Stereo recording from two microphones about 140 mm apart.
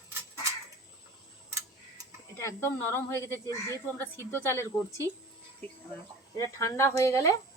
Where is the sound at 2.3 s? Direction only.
20° left (ahead or behind).